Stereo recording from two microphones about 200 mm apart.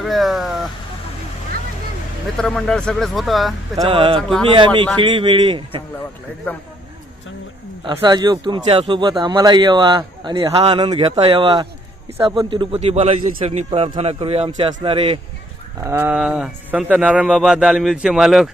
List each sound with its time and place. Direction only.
0.0 s speech: centre (ahead or behind)
2.4 s speech: 5° left (ahead or behind)
3.8 s a man's voice: 25° right (ahead or behind)
6.0 s a man's voice: 10° left (ahead or behind)
7.9 s a man's voice: 20° right (ahead or behind)
15.8 s speech: 10° right (ahead or behind)